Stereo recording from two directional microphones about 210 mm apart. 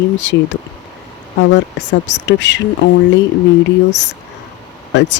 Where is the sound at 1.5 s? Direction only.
60° left (ahead or behind).